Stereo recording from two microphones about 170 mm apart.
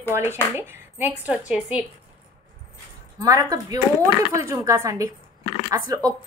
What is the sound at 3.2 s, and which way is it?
A woman's voice, 20° right (ahead or behind).